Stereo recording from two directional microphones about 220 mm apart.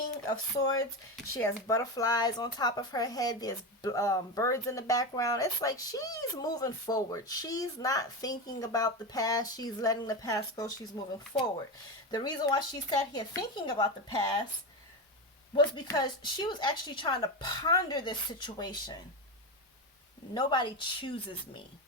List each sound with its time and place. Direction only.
0.3 s a woman's voice: 15° left (ahead or behind)
15.5 s a woman's voice: 20° left (ahead or behind)
20.3 s a woman's voice: 20° left (ahead or behind)